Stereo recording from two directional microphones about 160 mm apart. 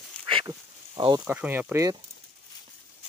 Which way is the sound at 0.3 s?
30° right (ahead or behind).